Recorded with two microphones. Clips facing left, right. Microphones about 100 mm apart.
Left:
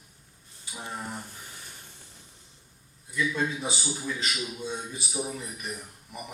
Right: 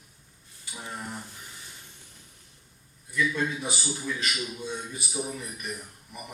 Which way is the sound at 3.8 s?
10° left (ahead or behind).